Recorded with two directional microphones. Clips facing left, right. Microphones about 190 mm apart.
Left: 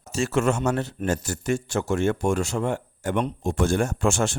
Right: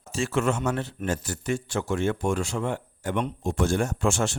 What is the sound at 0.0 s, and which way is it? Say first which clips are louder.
Speech: left 3 dB; 40° left (ahead or behind).